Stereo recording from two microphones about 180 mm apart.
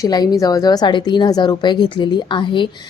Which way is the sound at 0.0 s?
20° left (ahead or behind).